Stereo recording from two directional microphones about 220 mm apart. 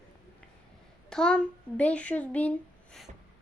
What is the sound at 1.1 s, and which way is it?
A woman's voice, 5° left (ahead or behind).